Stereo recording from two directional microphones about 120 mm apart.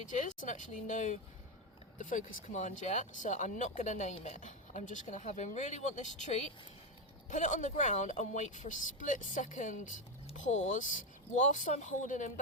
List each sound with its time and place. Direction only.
0.0 s speech: 90° left
7.3 s speech: 90° left